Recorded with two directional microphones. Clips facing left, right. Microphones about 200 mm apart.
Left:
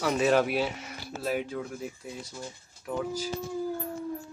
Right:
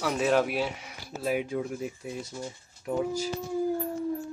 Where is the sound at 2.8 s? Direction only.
25° right (ahead or behind).